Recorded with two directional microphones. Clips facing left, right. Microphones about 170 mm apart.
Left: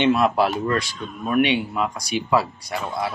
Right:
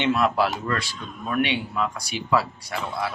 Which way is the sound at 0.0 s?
20° left (ahead or behind).